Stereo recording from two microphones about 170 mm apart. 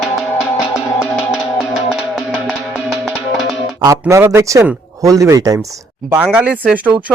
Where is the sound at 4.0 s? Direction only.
15° right (ahead or behind).